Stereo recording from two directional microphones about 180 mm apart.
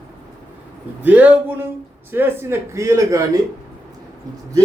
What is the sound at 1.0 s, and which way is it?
A man's voice, 10° right (ahead or behind).